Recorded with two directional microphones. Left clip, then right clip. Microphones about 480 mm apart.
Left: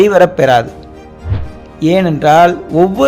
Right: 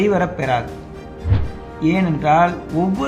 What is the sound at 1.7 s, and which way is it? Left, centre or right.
Speech, left.